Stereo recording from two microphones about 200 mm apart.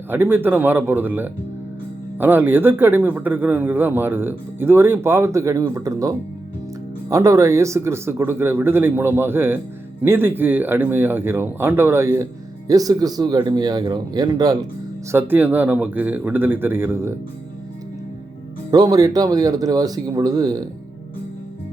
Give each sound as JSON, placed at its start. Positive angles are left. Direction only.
{"t": 0.1, "sound": "speech", "side_deg": -10}
{"t": 18.7, "sound": "speech", "side_deg": -20}